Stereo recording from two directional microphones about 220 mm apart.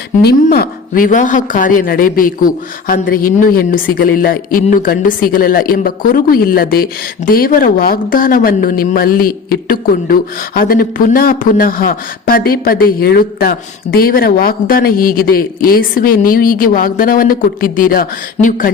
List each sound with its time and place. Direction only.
0.2 s speech: 45° left (ahead or behind)